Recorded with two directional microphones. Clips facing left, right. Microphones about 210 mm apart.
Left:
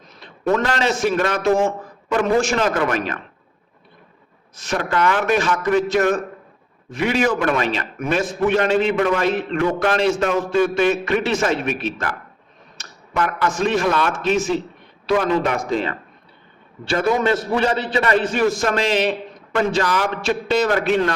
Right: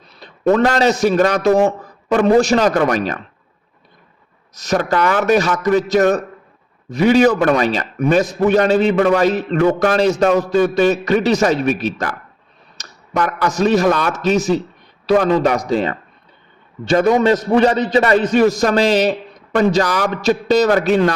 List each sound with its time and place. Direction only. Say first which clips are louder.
0.2 s a man's voice: right 6 dB; 40° right (ahead or behind)
4.5 s a man's voice: right 5 dB; 40° right (ahead or behind)
17.6 s a man's voice: right 6 dB; 40° right (ahead or behind)